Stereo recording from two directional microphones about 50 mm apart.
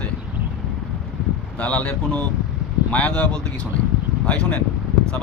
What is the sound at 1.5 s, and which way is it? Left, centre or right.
Speech, left.